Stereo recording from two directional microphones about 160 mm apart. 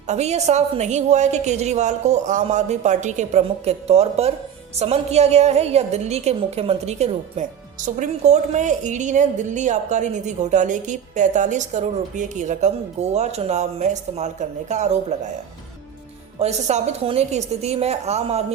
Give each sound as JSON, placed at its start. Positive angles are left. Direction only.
{"t": 0.1, "sound": "a woman's voice", "side_deg": -45}
{"t": 16.4, "sound": "a woman's voice", "side_deg": -45}